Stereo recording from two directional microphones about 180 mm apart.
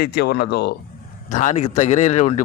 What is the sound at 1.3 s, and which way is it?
Speech, 45° left (ahead or behind).